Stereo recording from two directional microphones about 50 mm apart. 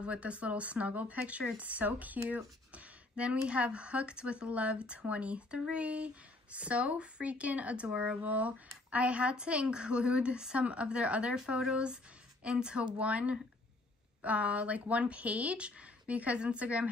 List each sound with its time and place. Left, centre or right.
0.0 s speech: right